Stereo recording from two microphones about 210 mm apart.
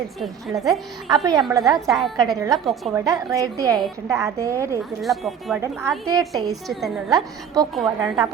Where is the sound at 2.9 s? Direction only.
15° right (ahead or behind).